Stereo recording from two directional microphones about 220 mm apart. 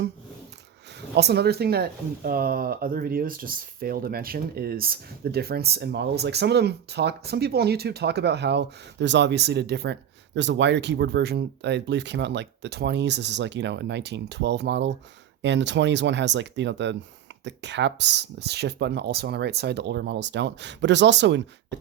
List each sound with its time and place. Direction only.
1.1 s speech: 50° right (ahead or behind)